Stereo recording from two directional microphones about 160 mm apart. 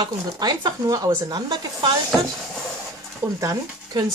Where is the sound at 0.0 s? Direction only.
25° right (ahead or behind).